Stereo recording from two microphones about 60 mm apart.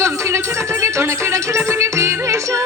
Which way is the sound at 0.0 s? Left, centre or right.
Right.